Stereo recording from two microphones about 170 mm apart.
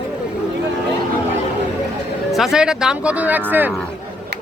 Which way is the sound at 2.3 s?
5° right (ahead or behind).